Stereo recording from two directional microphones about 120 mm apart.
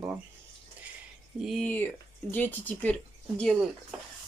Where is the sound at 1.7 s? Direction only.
15° left (ahead or behind).